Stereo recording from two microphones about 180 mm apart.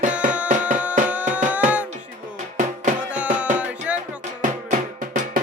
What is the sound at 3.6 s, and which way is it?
Music, 5° right (ahead or behind).